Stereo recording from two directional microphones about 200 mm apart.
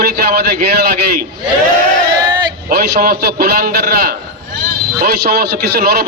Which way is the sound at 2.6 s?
45° right (ahead or behind).